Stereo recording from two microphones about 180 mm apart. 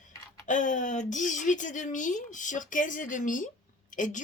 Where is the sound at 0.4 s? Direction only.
45° left (ahead or behind).